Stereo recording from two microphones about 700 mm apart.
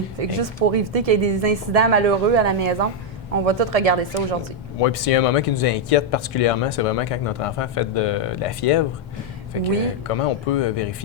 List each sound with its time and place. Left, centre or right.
0.2 s a woman's voice: right
4.8 s speech: left
10.1 s speech: left